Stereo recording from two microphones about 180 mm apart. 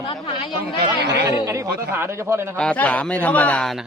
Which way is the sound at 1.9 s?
15° right (ahead or behind).